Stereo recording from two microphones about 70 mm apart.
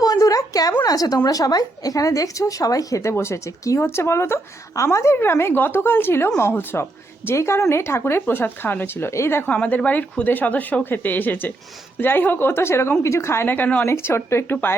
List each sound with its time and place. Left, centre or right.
0.0 s a woman's voice: left
3.8 s speech: left
5.1 s speech: left
9.5 s speech: left
13.8 s speech: left